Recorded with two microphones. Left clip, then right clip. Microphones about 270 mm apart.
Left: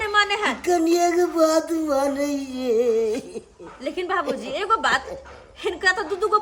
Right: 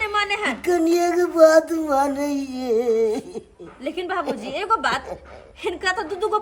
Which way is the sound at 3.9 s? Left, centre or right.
Centre.